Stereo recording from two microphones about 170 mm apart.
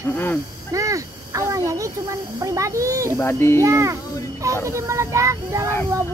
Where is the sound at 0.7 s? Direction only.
20° right (ahead or behind).